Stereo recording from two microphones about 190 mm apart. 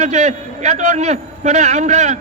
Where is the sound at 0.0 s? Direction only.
40° right (ahead or behind).